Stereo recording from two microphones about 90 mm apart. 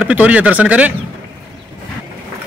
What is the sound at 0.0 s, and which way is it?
Speech, 15° right (ahead or behind).